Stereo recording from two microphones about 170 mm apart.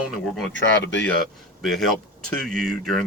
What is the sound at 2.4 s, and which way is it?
Speech, 5° left (ahead or behind).